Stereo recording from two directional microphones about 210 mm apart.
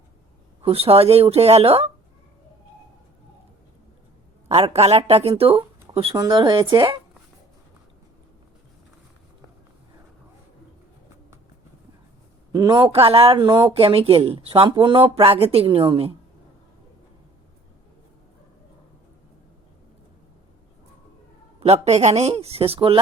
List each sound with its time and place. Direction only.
0.6 s speech: 30° right (ahead or behind)
4.4 s speech: 30° right (ahead or behind)
12.5 s speech: 20° right (ahead or behind)
21.6 s speech: 30° right (ahead or behind)